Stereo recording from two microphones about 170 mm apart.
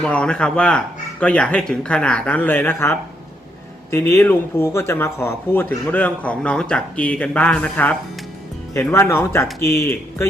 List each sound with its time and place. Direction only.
0.0 s speech: 5° left (ahead or behind)